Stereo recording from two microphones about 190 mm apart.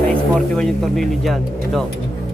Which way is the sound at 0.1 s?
5° left (ahead or behind).